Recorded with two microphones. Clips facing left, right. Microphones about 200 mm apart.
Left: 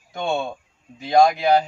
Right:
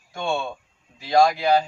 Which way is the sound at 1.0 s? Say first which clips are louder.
Left 2 dB; 20° left (ahead or behind).